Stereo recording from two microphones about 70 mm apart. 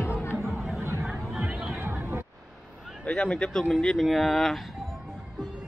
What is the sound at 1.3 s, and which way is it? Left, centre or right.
Music, centre.